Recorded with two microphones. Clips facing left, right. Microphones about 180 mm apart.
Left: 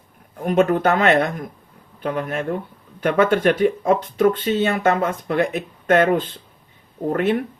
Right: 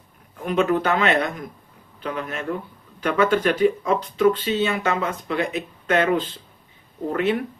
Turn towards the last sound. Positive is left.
turn(degrees=50)  # may be behind; listen again after turning